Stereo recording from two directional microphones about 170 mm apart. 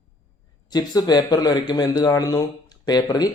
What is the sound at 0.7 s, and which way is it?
A man's voice, 25° left (ahead or behind).